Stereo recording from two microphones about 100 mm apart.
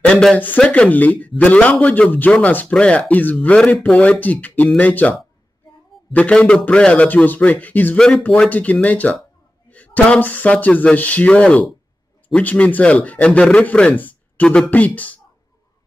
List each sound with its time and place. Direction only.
0.0 s a sound: 10° left (ahead or behind)
0.4 s a man's voice: 15° left (ahead or behind)
6.1 s a man's voice: 10° left (ahead or behind)